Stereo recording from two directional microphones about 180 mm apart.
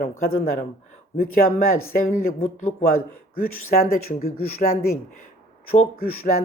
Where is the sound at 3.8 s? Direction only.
60° left (ahead or behind).